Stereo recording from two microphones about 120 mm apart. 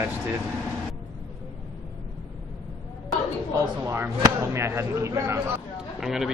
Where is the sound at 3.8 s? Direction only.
25° right (ahead or behind).